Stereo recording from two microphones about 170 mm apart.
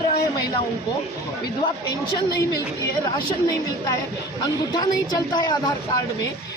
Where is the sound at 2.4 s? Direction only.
20° left (ahead or behind).